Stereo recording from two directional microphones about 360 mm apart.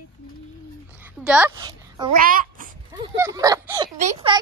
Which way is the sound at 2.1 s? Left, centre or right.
Right.